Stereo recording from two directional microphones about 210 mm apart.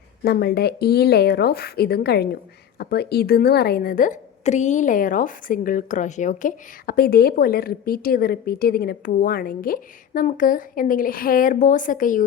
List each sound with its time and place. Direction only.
0.3 s speech: 50° left (ahead or behind)